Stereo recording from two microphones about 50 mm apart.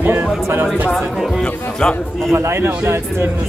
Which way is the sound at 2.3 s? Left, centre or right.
Right.